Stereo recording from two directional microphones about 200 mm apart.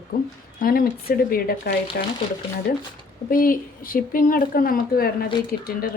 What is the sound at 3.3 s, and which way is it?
Speech, 45° left (ahead or behind).